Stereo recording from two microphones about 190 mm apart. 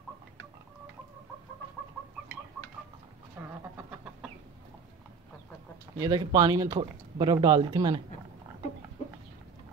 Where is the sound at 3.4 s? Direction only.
15° right (ahead or behind).